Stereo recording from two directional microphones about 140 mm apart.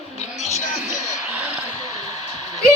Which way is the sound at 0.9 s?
15° right (ahead or behind).